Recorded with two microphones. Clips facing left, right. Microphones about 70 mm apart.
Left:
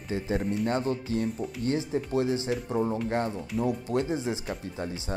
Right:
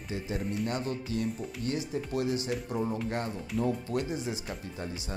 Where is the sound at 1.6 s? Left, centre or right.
Left.